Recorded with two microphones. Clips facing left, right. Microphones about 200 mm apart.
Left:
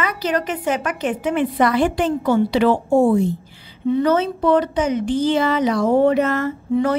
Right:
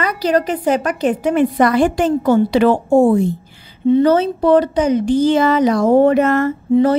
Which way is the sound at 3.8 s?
30° right (ahead or behind).